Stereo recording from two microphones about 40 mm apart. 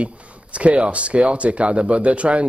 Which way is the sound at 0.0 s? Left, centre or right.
Right.